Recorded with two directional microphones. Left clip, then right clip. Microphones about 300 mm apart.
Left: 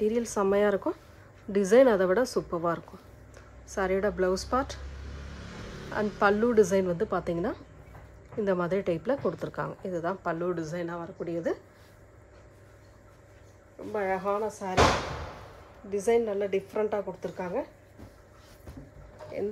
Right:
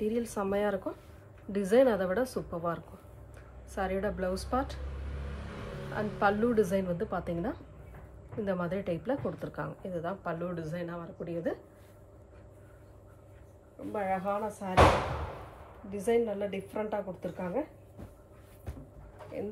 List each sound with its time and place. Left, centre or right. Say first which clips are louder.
0.0 s a woman's voice: left 6 dB; left
5.9 s a woman's voice: left 4 dB; left
13.9 s a woman's voice: left 3 dB; left
15.9 s a woman's voice: left 3 dB; left